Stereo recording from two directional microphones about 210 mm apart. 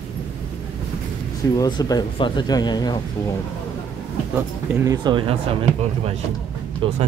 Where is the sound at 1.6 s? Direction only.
20° left (ahead or behind).